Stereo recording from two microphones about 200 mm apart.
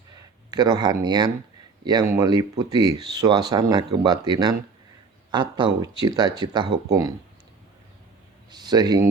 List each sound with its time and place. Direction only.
0.5 s speech: 20° right (ahead or behind)
8.4 s speech: 20° right (ahead or behind)